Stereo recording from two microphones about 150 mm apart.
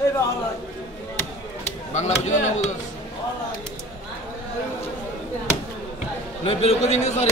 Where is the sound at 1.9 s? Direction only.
50° left (ahead or behind).